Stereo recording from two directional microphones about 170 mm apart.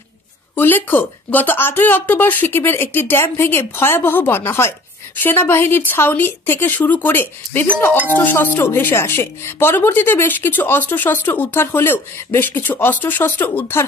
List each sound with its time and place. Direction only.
0.6 s speech: 10° left (ahead or behind)